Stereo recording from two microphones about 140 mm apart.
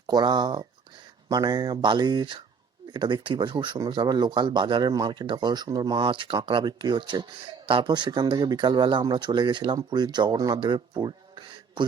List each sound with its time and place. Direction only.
0.1 s speech: 30° right (ahead or behind)